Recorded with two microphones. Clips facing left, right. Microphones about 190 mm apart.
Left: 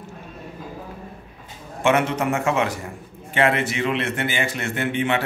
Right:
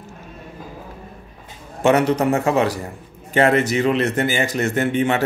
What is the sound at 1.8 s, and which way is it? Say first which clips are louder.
A man's voice: right 4 dB; 40° right (ahead or behind).